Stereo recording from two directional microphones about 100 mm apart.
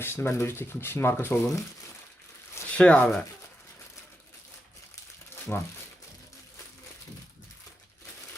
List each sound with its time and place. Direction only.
0.0 s speech: 25° left (ahead or behind)
2.7 s speech: 10° left (ahead or behind)
5.3 s crumpling: 20° left (ahead or behind)